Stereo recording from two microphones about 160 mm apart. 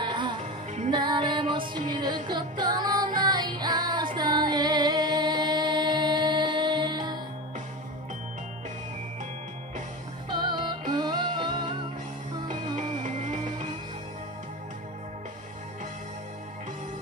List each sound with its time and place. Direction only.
0.0 s music: 30° right (ahead or behind)
10.3 s music: 30° right (ahead or behind)
12.4 s music: 50° right (ahead or behind)